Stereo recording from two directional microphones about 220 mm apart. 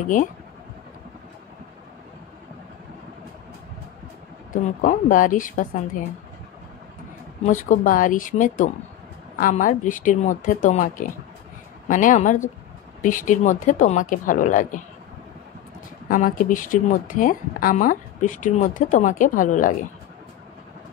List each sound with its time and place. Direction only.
4.5 s speech: 35° left (ahead or behind)
7.4 s speech: 35° left (ahead or behind)
16.1 s speech: 40° left (ahead or behind)